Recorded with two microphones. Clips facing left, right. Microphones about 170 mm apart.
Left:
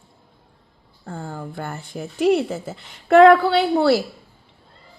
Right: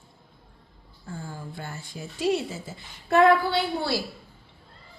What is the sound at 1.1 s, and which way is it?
Speech, 60° left (ahead or behind).